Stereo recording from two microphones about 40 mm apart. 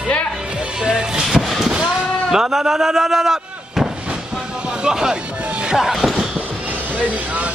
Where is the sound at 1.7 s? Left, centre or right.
Centre.